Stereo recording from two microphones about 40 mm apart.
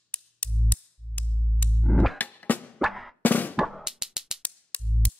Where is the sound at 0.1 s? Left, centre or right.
Left.